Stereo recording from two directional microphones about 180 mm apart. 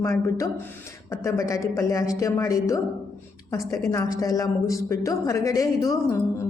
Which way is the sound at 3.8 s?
15° left (ahead or behind).